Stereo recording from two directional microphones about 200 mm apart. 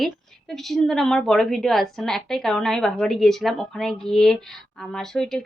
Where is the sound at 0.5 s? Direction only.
Centre (ahead or behind).